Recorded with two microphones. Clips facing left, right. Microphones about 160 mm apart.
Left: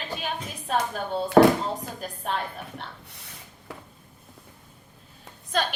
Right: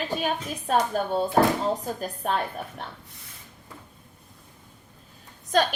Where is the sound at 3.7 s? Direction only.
70° left (ahead or behind).